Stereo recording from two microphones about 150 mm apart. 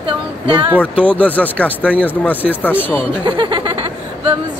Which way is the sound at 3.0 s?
35° right (ahead or behind).